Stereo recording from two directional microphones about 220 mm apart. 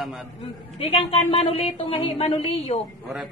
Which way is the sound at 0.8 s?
25° left (ahead or behind).